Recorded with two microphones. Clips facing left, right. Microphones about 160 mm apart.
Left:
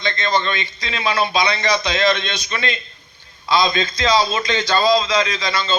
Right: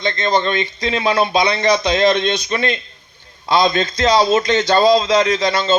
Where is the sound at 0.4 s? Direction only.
50° right (ahead or behind).